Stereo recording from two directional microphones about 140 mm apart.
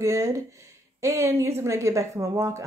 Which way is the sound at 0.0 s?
20° right (ahead or behind).